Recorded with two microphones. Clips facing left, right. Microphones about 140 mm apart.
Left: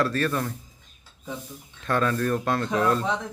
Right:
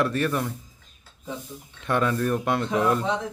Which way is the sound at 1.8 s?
15° right (ahead or behind).